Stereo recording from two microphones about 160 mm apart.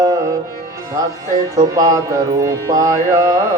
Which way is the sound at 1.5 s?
20° right (ahead or behind).